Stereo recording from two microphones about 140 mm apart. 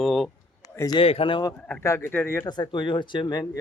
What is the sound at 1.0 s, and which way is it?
Speech, 40° left (ahead or behind).